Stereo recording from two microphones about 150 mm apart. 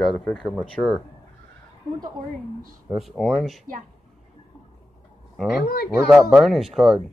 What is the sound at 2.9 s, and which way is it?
Speech, centre (ahead or behind).